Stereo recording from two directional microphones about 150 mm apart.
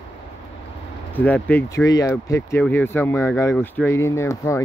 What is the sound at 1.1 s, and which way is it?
Speech, 10° left (ahead or behind).